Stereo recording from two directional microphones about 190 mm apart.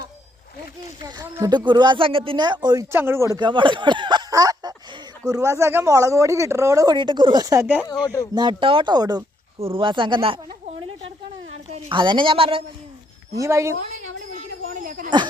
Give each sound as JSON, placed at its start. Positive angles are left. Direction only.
{"t": 1.0, "sound": "speech", "side_deg": -15}
{"t": 8.0, "sound": "speech", "side_deg": 20}
{"t": 8.4, "sound": "speech", "side_deg": -25}
{"t": 11.5, "sound": "a woman's voice", "side_deg": -30}
{"t": 13.3, "sound": "speech", "side_deg": -15}
{"t": 14.3, "sound": "a sound", "side_deg": -45}